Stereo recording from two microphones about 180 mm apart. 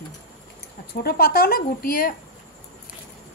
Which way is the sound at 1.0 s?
55° left (ahead or behind).